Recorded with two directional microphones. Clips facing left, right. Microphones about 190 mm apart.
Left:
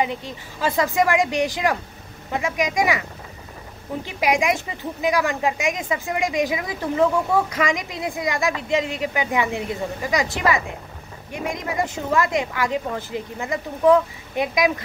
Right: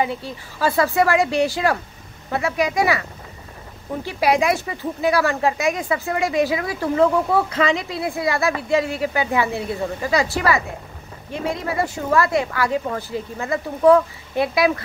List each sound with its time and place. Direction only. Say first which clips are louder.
0.0 s a woman's voice: right 1 dB; 15° left (ahead or behind)
4.0 s a woman's voice: right 3 dB; 15° left (ahead or behind)